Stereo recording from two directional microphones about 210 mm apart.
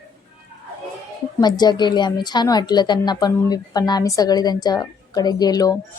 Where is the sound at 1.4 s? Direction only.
20° left (ahead or behind).